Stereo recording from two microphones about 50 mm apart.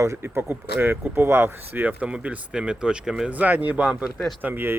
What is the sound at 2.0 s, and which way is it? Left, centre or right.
Speech, right.